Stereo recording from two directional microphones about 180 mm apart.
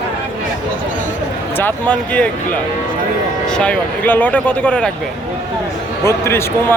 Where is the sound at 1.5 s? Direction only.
10° left (ahead or behind).